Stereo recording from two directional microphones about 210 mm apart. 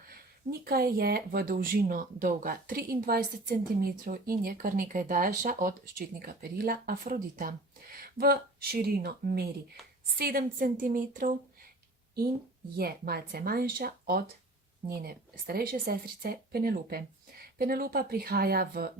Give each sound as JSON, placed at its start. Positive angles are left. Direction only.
{"t": 0.6, "sound": "a woman's voice", "side_deg": -45}
{"t": 12.7, "sound": "speech", "side_deg": -45}